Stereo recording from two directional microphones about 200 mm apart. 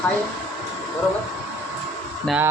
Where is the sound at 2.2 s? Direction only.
5° right (ahead or behind).